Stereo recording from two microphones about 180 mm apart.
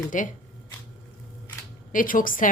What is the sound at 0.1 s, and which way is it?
Speech, 45° left (ahead or behind).